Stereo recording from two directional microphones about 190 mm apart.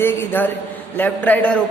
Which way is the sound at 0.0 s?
10° left (ahead or behind).